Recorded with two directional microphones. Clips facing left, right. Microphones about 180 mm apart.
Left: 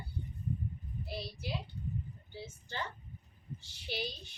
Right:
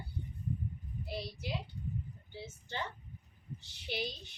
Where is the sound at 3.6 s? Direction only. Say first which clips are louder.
Right 1 dB; 20° right (ahead or behind).